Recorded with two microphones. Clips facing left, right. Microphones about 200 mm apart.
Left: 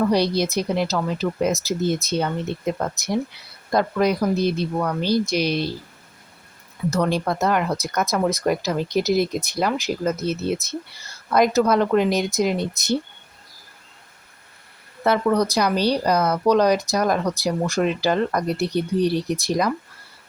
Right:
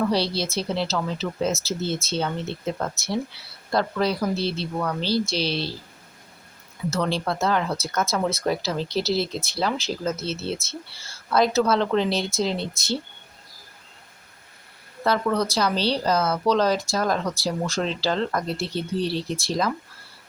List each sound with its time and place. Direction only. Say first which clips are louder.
0.1 s speech: left 4 dB; 15° left (ahead or behind)
6.9 s speech: left 3 dB; 15° left (ahead or behind)
15.0 s speech: left 4 dB; 20° left (ahead or behind)